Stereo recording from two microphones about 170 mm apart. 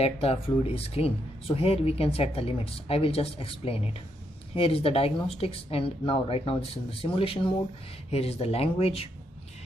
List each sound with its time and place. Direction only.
0.0 s speech: 35° left (ahead or behind)